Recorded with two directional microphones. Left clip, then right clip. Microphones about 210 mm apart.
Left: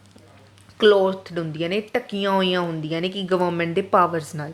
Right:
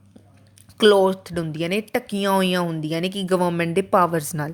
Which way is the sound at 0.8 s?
40° right (ahead or behind).